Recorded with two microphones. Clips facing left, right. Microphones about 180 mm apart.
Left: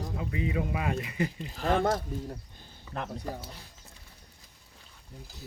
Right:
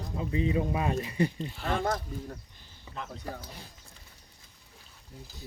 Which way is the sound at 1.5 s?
45° left (ahead or behind).